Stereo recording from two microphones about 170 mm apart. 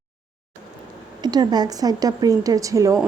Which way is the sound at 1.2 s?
25° right (ahead or behind).